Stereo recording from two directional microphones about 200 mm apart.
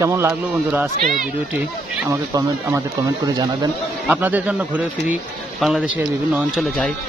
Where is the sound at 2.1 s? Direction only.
15° right (ahead or behind).